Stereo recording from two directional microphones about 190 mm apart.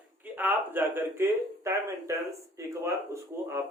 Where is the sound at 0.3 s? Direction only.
10° right (ahead or behind).